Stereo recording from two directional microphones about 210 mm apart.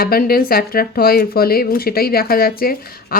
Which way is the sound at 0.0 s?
45° left (ahead or behind).